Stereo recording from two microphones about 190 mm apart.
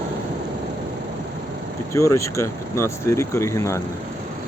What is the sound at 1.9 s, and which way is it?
Speech, 15° left (ahead or behind).